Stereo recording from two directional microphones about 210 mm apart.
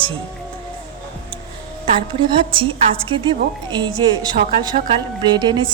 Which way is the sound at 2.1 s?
25° right (ahead or behind).